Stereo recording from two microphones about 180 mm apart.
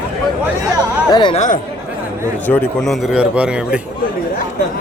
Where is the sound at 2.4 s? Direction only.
5° left (ahead or behind).